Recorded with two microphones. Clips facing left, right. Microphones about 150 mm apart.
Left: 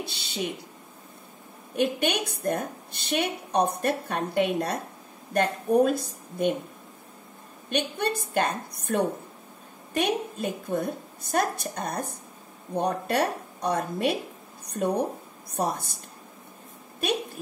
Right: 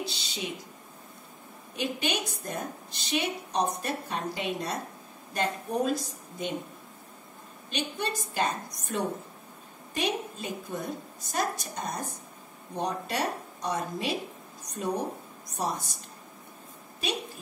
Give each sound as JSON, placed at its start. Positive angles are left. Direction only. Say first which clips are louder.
{"t": 0.0, "sound": "a sound", "louder": "even", "side_deg": 60}
{"t": 1.8, "sound": "a woman's voice", "louder": "left 6 dB", "side_deg": 60}
{"t": 7.7, "sound": "a woman's voice", "louder": "left 5 dB", "side_deg": 60}
{"t": 14.6, "sound": "a sound", "louder": "left 8 dB", "side_deg": 55}
{"t": 15.5, "sound": "a woman's voice", "louder": "left 4 dB", "side_deg": 60}
{"t": 17.0, "sound": "a woman's voice", "louder": "left 5 dB", "side_deg": 55}